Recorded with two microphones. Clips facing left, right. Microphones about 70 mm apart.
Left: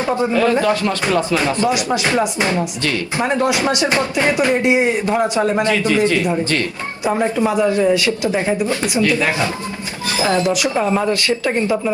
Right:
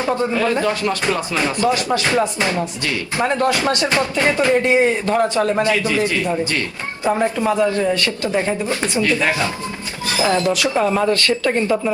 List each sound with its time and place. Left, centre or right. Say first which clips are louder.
0.0 s speech: left 2 dB; left
0.6 s speech: left 3 dB; right
1.5 s speech: even; centre
7.4 s speech: left 3 dB; centre
8.6 s speech: left 2 dB; right
10.2 s speech: even; left
10.4 s speech: even; centre